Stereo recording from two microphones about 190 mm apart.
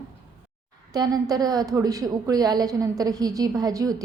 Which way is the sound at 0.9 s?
20° right (ahead or behind).